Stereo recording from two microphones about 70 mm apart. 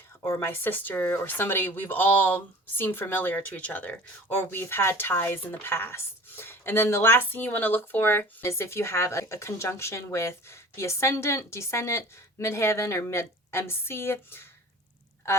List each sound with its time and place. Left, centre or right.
0.4 s speech: left